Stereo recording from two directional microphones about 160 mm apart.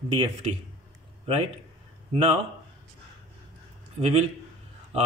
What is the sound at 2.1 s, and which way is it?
Speech, 40° right (ahead or behind).